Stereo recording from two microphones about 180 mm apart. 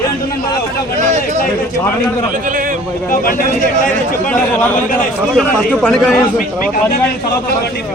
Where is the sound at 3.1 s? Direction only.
50° left (ahead or behind).